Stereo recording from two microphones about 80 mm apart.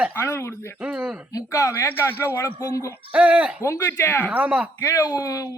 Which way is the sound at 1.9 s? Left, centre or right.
Left.